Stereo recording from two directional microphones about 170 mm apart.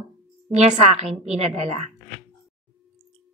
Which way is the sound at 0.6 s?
40° right (ahead or behind).